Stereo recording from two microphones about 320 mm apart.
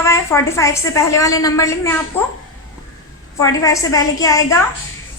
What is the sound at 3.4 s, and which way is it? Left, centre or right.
A woman's voice, centre.